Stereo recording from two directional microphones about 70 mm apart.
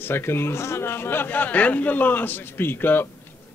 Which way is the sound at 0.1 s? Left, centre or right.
Left.